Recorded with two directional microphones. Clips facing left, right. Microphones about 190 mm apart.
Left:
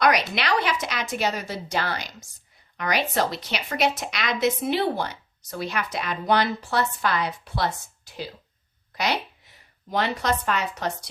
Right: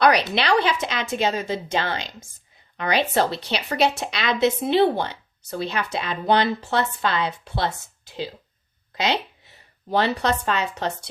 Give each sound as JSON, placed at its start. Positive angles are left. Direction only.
{"t": 0.0, "sound": "a woman's voice", "side_deg": -30}